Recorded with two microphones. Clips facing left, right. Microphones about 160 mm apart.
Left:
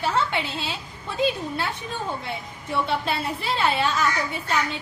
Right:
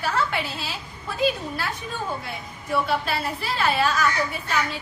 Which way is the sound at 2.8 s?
25° left (ahead or behind).